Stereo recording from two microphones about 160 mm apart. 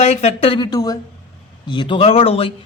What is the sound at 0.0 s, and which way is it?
Speech, 45° left (ahead or behind).